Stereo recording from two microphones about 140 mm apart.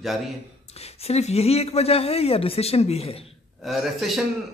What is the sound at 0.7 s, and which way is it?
Speech, 50° left (ahead or behind).